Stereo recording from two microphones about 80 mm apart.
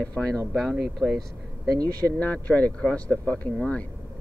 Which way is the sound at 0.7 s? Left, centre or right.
Centre.